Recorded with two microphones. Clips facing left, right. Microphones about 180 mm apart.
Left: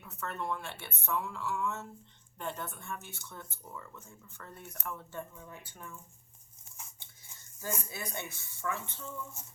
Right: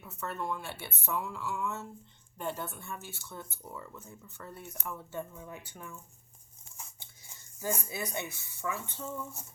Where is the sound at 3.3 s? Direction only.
30° right (ahead or behind).